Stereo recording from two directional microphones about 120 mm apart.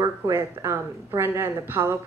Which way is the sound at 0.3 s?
20° right (ahead or behind).